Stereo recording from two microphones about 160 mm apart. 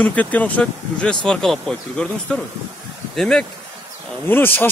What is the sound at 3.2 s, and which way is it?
Speech, 5° left (ahead or behind).